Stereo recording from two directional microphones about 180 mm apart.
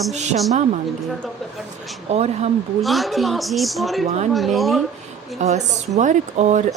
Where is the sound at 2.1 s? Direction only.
35° right (ahead or behind).